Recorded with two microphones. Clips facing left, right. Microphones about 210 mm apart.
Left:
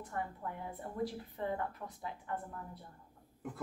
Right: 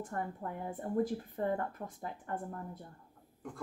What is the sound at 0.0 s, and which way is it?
A woman's voice, 45° right (ahead or behind).